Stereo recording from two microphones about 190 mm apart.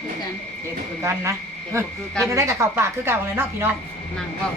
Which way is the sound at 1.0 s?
15° right (ahead or behind).